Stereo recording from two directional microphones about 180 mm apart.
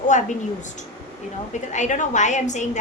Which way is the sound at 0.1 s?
40° left (ahead or behind).